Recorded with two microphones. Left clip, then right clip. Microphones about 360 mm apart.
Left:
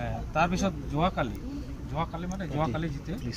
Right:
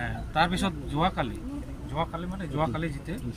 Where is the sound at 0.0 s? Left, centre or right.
Centre.